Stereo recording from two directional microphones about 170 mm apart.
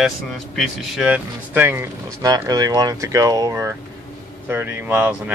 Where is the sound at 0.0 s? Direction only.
Centre (ahead or behind).